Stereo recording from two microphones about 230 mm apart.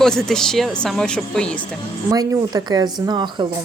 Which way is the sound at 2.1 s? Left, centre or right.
Centre.